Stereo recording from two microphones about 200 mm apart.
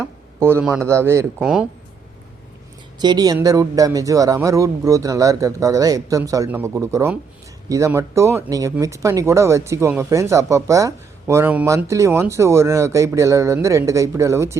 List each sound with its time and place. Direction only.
0.0 s a sound: 10° right (ahead or behind)
0.9 s speech: 15° right (ahead or behind)
1.4 s speech: 5° right (ahead or behind)
3.0 s speech: 20° right (ahead or behind)